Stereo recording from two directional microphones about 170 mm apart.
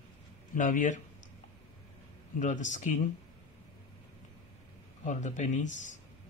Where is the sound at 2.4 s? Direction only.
45° left (ahead or behind).